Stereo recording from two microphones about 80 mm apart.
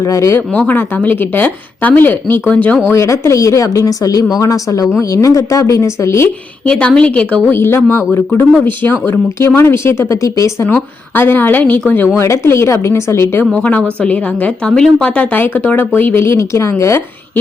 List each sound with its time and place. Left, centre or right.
0.0 s a woman's voice: left
0.3 s speech: left
2.8 s a woman's voice: left
6.7 s a woman's voice: centre
7.5 s speech: left
10.7 s speech: left
12.1 s speech: left
13.6 s a woman's voice: centre; by 17.0 s left